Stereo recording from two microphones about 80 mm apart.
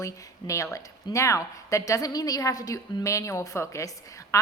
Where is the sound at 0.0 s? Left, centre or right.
Left.